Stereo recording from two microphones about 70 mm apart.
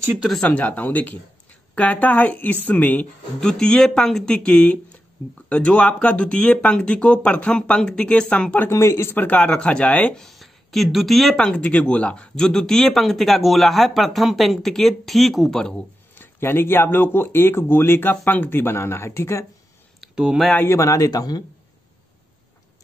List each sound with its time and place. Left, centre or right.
0.4 s speech: left
3.3 s speech: centre
8.6 s speech: left
9.1 s speech: left
10.1 s speech: centre
11.3 s speech: centre
16.2 s speech: left
20.6 s a man's voice: left